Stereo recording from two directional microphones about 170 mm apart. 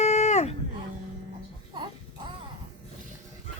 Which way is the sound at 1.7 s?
25° right (ahead or behind).